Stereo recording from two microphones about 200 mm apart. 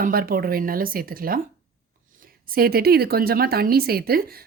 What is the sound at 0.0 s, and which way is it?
A woman's voice, 45° right (ahead or behind).